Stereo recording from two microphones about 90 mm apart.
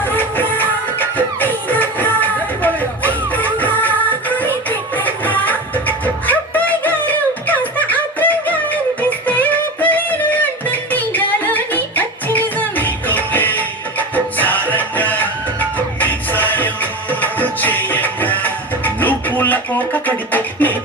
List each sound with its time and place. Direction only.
0.0 s music: 20° left (ahead or behind)
4.9 s music: 20° left (ahead or behind)
6.2 s a sound: 20° left (ahead or behind)
14.3 s music: 20° left (ahead or behind)